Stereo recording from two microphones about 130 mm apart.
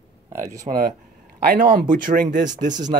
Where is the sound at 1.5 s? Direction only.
90° right; by 2.8 s 75° right (ahead or behind).